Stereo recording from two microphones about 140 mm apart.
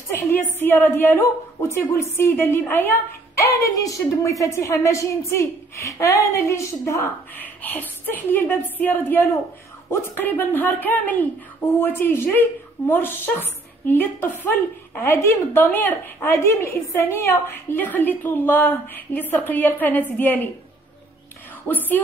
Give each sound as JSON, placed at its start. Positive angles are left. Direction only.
{"t": 0.1, "sound": "a woman's voice", "side_deg": 15}
{"t": 21.6, "sound": "a woman's voice", "side_deg": 15}